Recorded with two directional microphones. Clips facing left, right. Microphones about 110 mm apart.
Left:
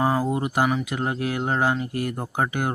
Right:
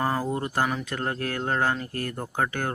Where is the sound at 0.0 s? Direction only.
10° left (ahead or behind).